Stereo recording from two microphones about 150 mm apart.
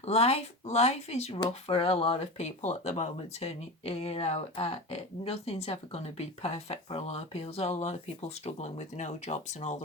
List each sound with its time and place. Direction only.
0.0 s speech: 45° left (ahead or behind)